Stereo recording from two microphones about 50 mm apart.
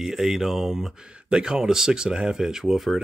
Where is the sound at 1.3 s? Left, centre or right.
Centre.